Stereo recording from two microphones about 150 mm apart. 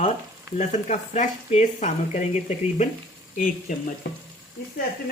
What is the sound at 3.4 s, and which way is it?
Speech, 60° left (ahead or behind).